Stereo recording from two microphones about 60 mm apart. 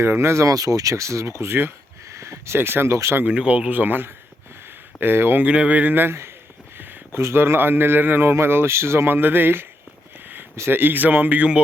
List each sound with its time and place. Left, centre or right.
0.0 s speech: right
0.4 s speech: right
2.1 s a sound: right
2.6 s speech: right
3.2 s speech: right
5.4 s speech: right
7.2 s speech: right